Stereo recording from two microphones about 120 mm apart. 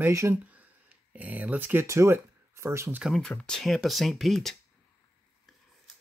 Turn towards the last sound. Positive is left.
turn(degrees=0)  # may be behind; listen again after turning